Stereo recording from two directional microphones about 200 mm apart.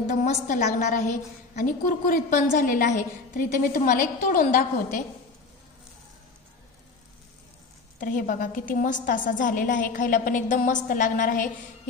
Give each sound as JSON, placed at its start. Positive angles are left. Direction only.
{"t": 0.1, "sound": "a woman's voice", "side_deg": 40}
{"t": 8.0, "sound": "a woman's voice", "side_deg": 40}